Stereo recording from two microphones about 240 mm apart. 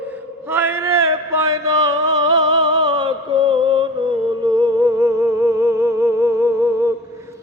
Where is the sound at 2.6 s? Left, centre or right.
Centre.